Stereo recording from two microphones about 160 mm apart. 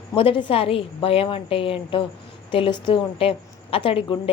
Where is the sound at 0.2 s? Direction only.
35° left (ahead or behind).